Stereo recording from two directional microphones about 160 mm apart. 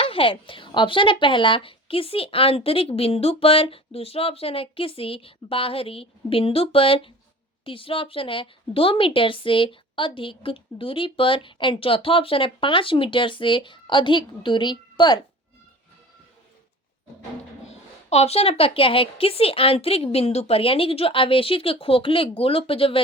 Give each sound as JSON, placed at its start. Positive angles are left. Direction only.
{"t": 0.0, "sound": "a woman's voice", "side_deg": 35}
{"t": 17.7, "sound": "a woman's voice", "side_deg": 40}